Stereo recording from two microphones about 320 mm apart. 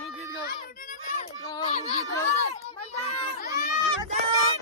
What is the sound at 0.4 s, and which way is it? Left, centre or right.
Children playing, left.